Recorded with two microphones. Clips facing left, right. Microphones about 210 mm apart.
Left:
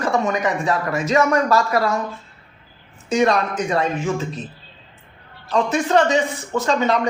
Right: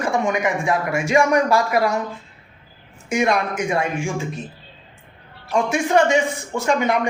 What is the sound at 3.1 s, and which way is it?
Speech, 15° right (ahead or behind).